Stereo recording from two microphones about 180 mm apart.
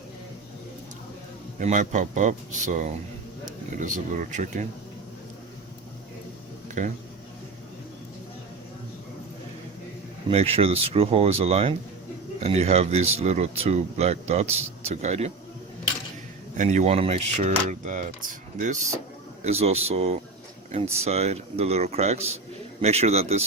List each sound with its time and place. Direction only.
1.5 s speech: 45° right (ahead or behind)
6.8 s speech: 40° right (ahead or behind)
10.2 s speech: 30° right (ahead or behind)
16.6 s speech: 40° right (ahead or behind)